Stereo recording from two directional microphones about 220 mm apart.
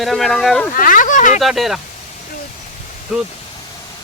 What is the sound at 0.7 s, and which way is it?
Speech, 40° left (ahead or behind).